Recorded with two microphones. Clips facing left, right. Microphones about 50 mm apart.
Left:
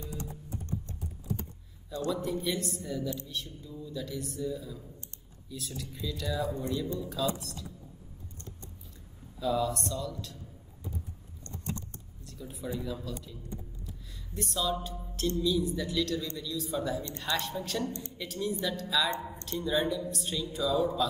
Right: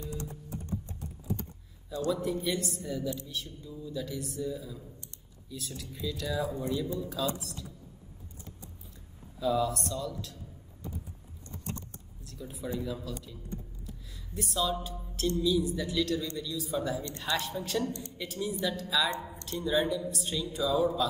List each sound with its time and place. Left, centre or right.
0.0 s typing: left
2.0 s a woman's voice: centre
9.4 s a woman's voice: centre
12.3 s a woman's voice: centre
14.3 s a woman's voice: centre